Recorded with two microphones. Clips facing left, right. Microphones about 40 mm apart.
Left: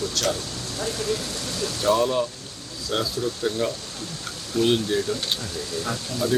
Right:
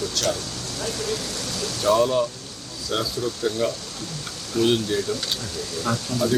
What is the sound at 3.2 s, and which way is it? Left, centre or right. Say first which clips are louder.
Speech: even; centre.